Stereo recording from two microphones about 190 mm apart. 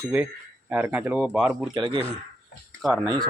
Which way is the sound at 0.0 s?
5° right (ahead or behind).